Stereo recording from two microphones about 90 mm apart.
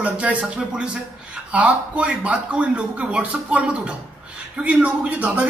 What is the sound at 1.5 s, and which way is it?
A man's voice, 15° right (ahead or behind).